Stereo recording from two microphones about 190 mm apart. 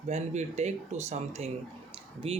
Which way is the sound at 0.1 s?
35° right (ahead or behind).